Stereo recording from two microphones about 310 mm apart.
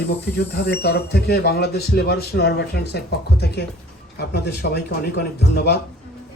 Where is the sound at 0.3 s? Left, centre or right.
Left.